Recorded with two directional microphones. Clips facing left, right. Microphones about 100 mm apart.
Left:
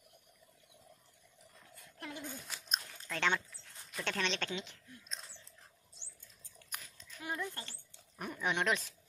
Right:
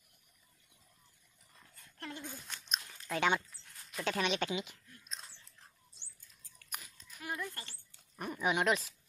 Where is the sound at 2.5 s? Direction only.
5° left (ahead or behind).